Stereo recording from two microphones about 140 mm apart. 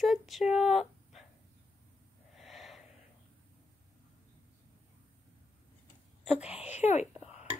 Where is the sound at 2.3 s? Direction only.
Centre (ahead or behind).